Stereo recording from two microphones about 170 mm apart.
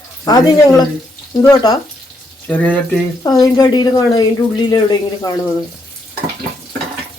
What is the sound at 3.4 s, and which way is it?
Speech, 25° left (ahead or behind).